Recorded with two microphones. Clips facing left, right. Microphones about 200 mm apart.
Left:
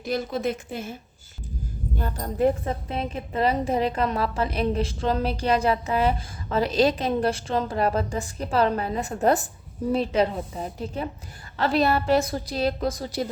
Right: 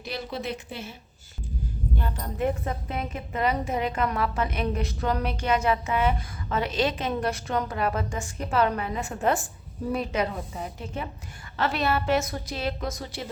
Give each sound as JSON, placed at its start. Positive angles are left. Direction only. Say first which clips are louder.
{"t": 0.1, "sound": "a woman's voice", "louder": "left 6 dB", "side_deg": 45}
{"t": 2.0, "sound": "a woman's voice", "louder": "left 6 dB", "side_deg": 40}
{"t": 2.9, "sound": "a woman's voice", "louder": "left 3 dB", "side_deg": 30}